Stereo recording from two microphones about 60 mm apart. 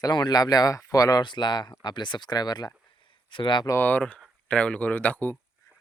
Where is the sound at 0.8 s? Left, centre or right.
Left.